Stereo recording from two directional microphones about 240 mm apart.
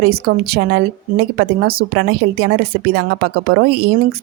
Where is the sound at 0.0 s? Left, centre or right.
Right.